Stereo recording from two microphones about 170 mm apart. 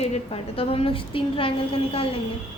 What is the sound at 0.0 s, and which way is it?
A woman's voice, 35° left (ahead or behind).